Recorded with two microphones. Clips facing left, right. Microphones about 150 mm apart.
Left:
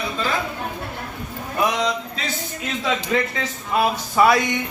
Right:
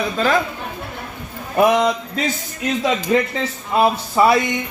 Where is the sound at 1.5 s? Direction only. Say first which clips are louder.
Right 7 dB; 50° right (ahead or behind); by 4.4 s 25° right (ahead or behind).